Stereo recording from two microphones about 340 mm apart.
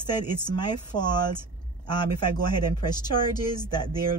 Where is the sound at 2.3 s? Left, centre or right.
Centre.